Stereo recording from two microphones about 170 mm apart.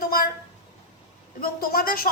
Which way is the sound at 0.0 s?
60° left (ahead or behind).